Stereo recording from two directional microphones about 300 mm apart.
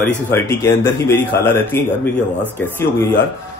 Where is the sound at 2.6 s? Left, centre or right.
Centre.